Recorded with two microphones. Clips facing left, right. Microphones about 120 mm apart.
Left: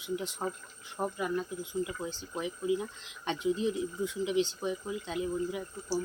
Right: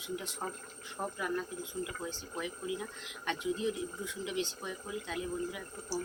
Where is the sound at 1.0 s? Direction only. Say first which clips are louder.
Left 4 dB; 15° left (ahead or behind).